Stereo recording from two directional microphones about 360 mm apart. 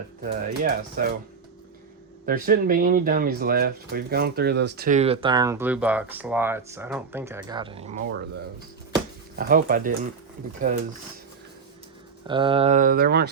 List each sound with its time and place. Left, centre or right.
0.2 s speech: right
2.2 s speech: right
9.3 s speech: right
12.3 s speech: centre